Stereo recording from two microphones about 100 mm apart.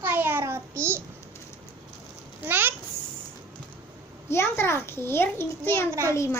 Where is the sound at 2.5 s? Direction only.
20° right (ahead or behind).